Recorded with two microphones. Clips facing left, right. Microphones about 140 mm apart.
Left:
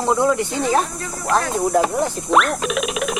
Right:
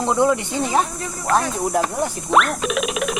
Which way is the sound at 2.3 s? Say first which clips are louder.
Even; centre (ahead or behind).